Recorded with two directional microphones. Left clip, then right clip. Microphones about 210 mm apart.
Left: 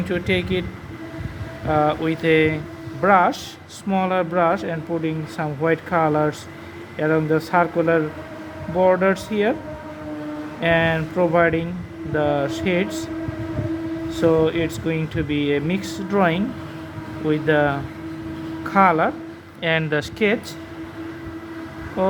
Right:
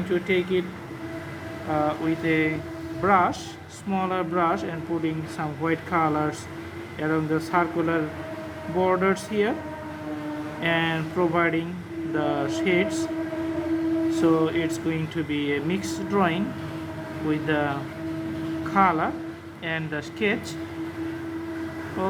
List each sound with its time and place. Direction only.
0.1 s speech: 45° left (ahead or behind)
1.7 s speech: 45° left (ahead or behind)
10.6 s speech: 35° left (ahead or behind)
14.1 s speech: 30° left (ahead or behind)
22.0 s speech: 35° left (ahead or behind)